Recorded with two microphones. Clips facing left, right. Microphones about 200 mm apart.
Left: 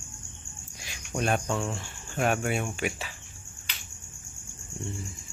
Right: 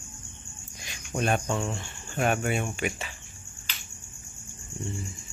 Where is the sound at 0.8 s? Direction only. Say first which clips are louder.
Right 1 dB; centre (ahead or behind).